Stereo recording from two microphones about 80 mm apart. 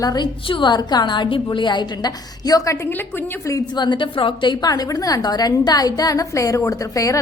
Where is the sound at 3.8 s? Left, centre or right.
Left.